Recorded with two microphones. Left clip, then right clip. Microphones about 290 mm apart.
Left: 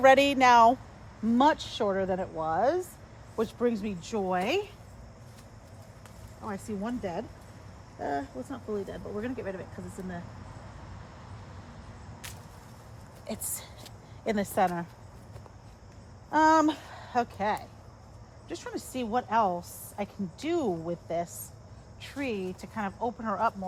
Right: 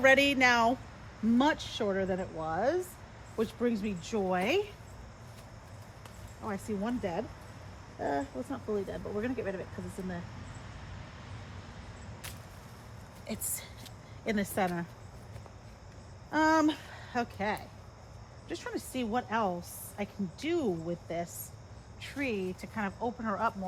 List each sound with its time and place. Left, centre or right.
0.0 s speech: centre
6.4 s speech: centre
13.2 s a woman's voice: centre
16.3 s speech: centre